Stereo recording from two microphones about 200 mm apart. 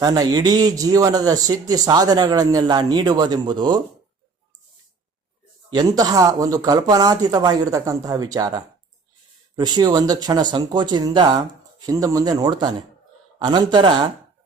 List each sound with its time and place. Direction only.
0.0 s speech: 20° right (ahead or behind)
5.7 s speech: 20° right (ahead or behind)